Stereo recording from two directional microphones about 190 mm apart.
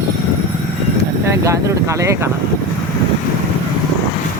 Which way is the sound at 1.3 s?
15° right (ahead or behind).